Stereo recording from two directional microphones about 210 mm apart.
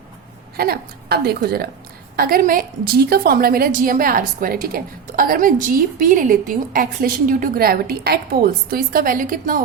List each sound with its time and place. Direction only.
0.5 s a woman's voice: 45° right (ahead or behind)